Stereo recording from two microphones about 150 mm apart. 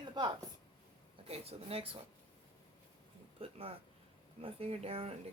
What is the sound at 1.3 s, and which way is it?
Speech, 40° right (ahead or behind).